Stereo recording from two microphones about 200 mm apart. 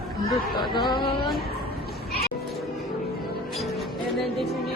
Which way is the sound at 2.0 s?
50° left (ahead or behind).